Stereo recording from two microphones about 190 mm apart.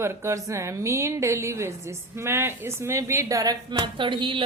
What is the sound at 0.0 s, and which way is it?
A woman's voice, 15° right (ahead or behind).